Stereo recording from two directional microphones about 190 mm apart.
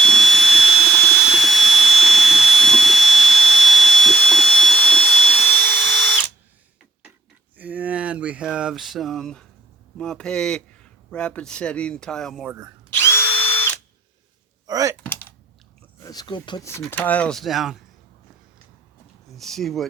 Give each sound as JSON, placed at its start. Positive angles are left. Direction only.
{"t": 0.0, "sound": "jet engine", "side_deg": 0}
{"t": 7.5, "sound": "a sound", "side_deg": -10}
{"t": 10.0, "sound": "speech", "side_deg": 5}
{"t": 13.0, "sound": "drill", "side_deg": 15}
{"t": 14.7, "sound": "speech", "side_deg": -20}
{"t": 15.0, "sound": "typing", "side_deg": 10}
{"t": 16.0, "sound": "speech", "side_deg": 20}
{"t": 16.8, "sound": "speech", "side_deg": 10}
{"t": 19.4, "sound": "speech", "side_deg": 0}